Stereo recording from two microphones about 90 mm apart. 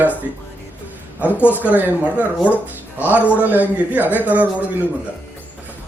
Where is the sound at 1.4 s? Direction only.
15° right (ahead or behind).